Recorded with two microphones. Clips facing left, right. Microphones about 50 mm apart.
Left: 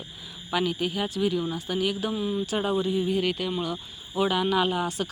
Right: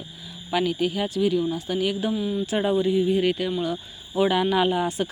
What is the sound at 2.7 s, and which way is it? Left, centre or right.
Speech, centre.